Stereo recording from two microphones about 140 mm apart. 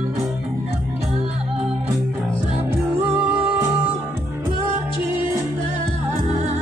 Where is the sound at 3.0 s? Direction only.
10° right (ahead or behind).